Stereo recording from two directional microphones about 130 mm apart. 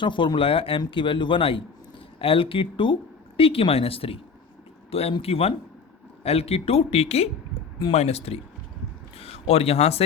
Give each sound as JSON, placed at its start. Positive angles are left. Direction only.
{"t": 0.0, "sound": "speech", "side_deg": 40}